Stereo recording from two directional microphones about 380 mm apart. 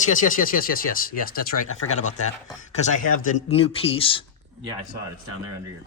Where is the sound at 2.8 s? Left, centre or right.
Left.